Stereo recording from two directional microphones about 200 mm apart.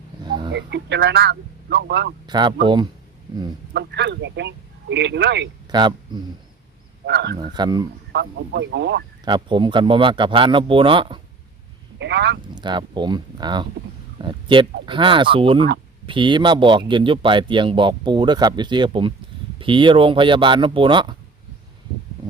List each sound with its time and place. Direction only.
0.3 s a sound: 25° right (ahead or behind)
0.5 s speech: 60° right (ahead or behind)
2.2 s a man's voice: 20° right (ahead or behind)
3.8 s speech: 60° right (ahead or behind)
5.7 s a man's voice: 20° right (ahead or behind)
7.0 s speech: 55° right (ahead or behind)
7.3 s a man's voice: 20° right (ahead or behind)
8.1 s speech: 55° right (ahead or behind)
9.2 s a man's voice: 25° right (ahead or behind)
11.9 s speech: 60° right (ahead or behind)
12.5 s a man's voice: 20° right (ahead or behind)